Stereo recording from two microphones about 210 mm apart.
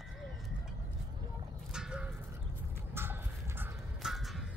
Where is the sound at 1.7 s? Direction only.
5° right (ahead or behind).